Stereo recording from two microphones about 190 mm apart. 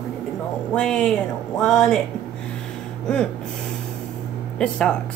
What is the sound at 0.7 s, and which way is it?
Speech, 5° left (ahead or behind).